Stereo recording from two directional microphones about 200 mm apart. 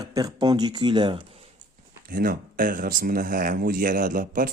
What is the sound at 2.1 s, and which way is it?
Speech, 45° right (ahead or behind).